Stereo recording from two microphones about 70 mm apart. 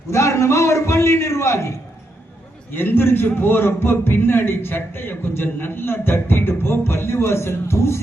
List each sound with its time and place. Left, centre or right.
0.1 s a man's voice: left
2.7 s a man's voice: left